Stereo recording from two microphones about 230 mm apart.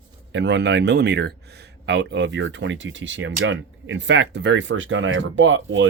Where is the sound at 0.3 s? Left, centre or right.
Right.